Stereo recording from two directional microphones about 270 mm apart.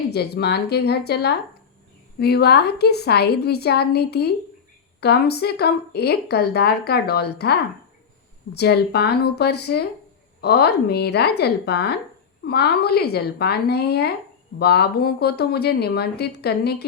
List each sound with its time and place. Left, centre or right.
0.1 s a woman's voice: left